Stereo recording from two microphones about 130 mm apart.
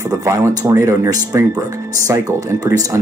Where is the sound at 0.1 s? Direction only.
25° right (ahead or behind).